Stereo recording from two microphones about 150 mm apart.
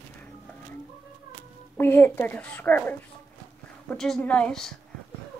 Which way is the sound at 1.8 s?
15° left (ahead or behind).